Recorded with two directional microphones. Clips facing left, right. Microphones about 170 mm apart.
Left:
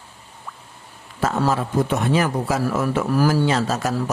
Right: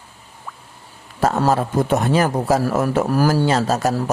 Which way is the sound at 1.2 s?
40° right (ahead or behind).